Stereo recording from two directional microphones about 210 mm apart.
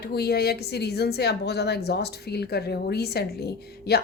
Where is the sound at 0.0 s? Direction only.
50° left (ahead or behind).